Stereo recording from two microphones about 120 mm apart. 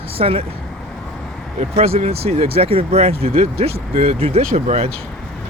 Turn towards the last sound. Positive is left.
turn(degrees=-60)  # may be behind; listen again after turning